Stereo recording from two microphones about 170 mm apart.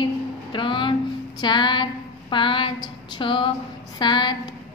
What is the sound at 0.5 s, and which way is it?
Music, 30° left (ahead or behind).